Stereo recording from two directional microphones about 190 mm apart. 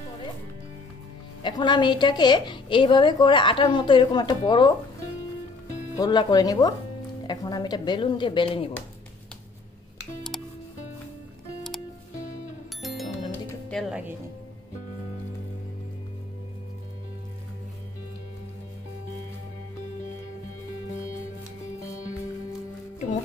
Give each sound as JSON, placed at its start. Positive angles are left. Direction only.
{"t": 1.4, "sound": "a woman's voice", "side_deg": 25}
{"t": 5.9, "sound": "a woman's voice", "side_deg": 20}
{"t": 12.8, "sound": "music", "side_deg": 0}